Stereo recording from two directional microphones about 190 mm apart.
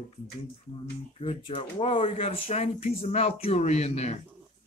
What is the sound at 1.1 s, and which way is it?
Speech, 30° left (ahead or behind).